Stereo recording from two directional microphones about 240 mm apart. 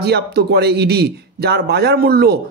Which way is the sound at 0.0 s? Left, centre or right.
Right.